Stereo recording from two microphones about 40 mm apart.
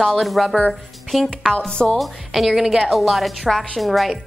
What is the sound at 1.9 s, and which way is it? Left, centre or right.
A woman's voice, centre.